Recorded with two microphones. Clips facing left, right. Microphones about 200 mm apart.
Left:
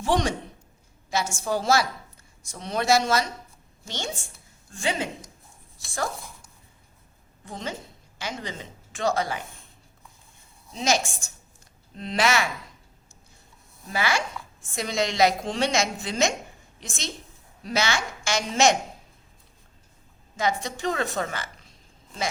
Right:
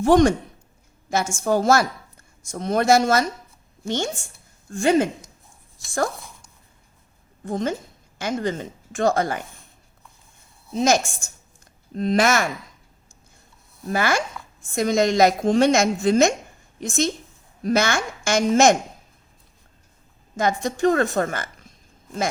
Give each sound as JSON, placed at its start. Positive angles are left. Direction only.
{"t": 0.0, "sound": "a woman's voice", "side_deg": -50}
{"t": 7.4, "sound": "a woman's voice", "side_deg": -50}
{"t": 10.8, "sound": "a woman's voice", "side_deg": -50}
{"t": 13.9, "sound": "a woman's voice", "side_deg": -50}
{"t": 20.3, "sound": "a woman's voice", "side_deg": -50}